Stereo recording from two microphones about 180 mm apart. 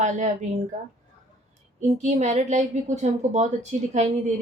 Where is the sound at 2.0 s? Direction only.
40° right (ahead or behind).